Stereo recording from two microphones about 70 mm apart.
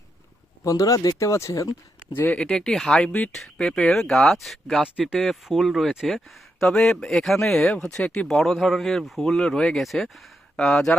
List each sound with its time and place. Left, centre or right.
0.6 s speech: left
2.1 s speech: left
2.4 s speech: centre
4.8 s speech: centre